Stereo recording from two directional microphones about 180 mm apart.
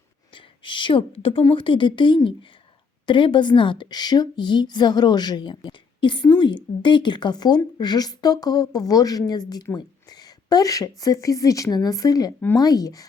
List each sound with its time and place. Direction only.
0.3 s a woman's voice: 25° left (ahead or behind)